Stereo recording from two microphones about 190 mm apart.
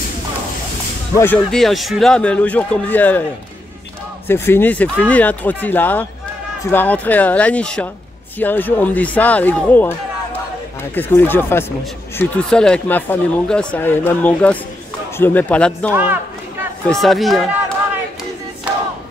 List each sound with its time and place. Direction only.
1.1 s speech: 10° left (ahead or behind)
4.3 s speech: 10° left (ahead or behind)
11.0 s speech: 10° left (ahead or behind)
15.9 s speech: 10° right (ahead or behind)
16.9 s speech: centre (ahead or behind)